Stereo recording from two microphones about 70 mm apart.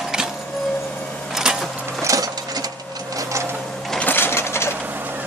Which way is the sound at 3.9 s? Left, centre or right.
Left.